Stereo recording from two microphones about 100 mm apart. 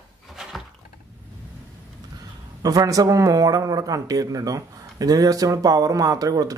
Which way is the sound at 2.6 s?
35° right (ahead or behind).